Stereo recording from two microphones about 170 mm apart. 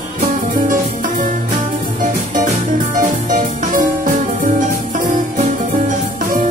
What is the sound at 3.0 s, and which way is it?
Music, 50° right (ahead or behind).